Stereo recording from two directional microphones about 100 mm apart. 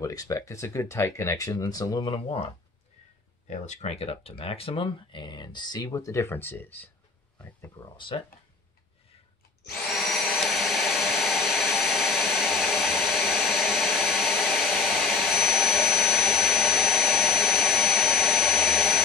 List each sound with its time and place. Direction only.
0.0 s speech: 35° left (ahead or behind)
2.1 s speech: 75° left (ahead or behind)
3.8 s speech: 85° left; by 5.9 s 45° left (ahead or behind)
5.9 s speech: 30° left (ahead or behind)
9.8 s vacuum cleaner: centre (ahead or behind)